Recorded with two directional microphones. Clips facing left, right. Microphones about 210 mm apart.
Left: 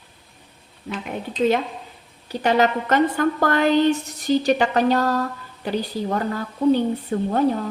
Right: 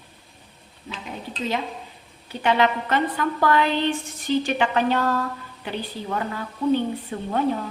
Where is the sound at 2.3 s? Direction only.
40° left (ahead or behind).